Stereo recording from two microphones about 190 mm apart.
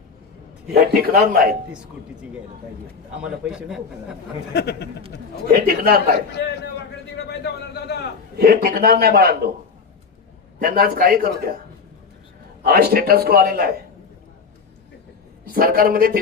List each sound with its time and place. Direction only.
0.7 s a man's voice: 55° right (ahead or behind)
3.2 s a man's voice: 5° right (ahead or behind)
4.5 s a man's voice: 60° left (ahead or behind)
5.5 s a man's voice: 50° right (ahead or behind)
6.3 s a man's voice: 60° left (ahead or behind)
8.4 s a man's voice: 50° right (ahead or behind)
10.6 s a man's voice: 50° right (ahead or behind)
12.6 s a man's voice: 55° right (ahead or behind)
15.4 s a man's voice: 50° right (ahead or behind)